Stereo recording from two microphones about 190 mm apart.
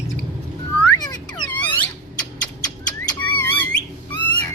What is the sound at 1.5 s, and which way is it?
Squeak, 10° left (ahead or behind).